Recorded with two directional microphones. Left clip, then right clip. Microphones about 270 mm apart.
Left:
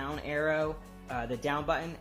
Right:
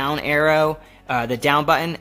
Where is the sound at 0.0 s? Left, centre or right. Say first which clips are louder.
Right 13 dB; right.